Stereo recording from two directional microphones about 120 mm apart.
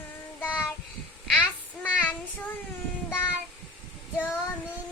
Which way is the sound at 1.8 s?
15° left (ahead or behind).